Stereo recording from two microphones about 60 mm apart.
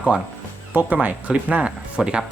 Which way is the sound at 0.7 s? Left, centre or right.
Right.